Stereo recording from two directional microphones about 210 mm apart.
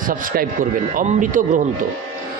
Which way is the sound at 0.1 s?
40° right (ahead or behind).